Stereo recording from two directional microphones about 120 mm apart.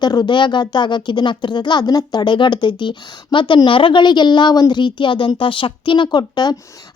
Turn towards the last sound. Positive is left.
turn(degrees=35)  # may be behind; listen again after turning